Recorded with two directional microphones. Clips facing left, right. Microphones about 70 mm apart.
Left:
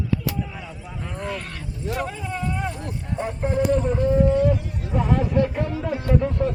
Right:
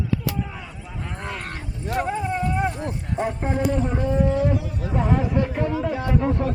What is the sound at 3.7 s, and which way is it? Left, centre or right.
Speech, centre.